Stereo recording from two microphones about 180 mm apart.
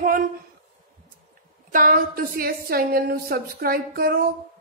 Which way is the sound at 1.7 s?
50° right (ahead or behind).